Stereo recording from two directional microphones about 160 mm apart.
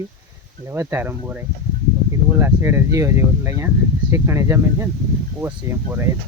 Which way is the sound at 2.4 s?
15° right (ahead or behind).